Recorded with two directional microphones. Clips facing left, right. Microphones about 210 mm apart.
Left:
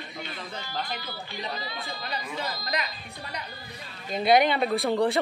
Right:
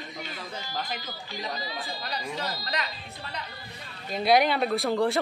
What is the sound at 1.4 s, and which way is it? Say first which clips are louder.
Speech: right 1 dB; 40° right (ahead or behind).